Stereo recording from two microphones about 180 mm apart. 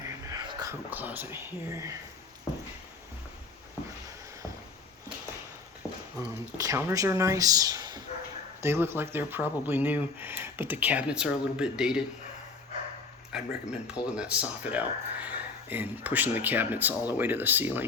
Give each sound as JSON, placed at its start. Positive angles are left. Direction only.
{"t": 0.0, "sound": "speech", "side_deg": -20}
{"t": 6.1, "sound": "speech", "side_deg": -20}
{"t": 13.3, "sound": "speech", "side_deg": -5}